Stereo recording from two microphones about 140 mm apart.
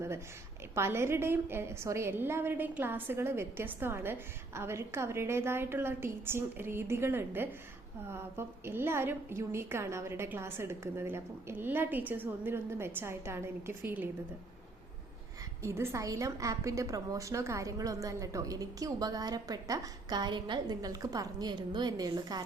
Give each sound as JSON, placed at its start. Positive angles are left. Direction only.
{"t": 0.8, "sound": "a woman's voice", "side_deg": -20}
{"t": 15.6, "sound": "a woman's voice", "side_deg": -20}